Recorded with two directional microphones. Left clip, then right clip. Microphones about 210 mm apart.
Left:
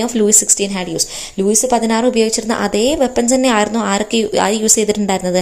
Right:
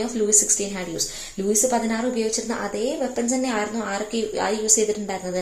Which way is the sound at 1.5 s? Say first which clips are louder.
Left 7 dB; 30° left (ahead or behind).